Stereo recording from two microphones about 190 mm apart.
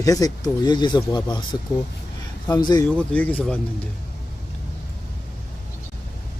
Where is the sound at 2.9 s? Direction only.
5° left (ahead or behind).